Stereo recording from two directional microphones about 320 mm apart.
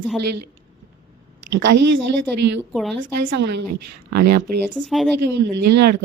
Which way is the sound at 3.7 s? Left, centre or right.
Right.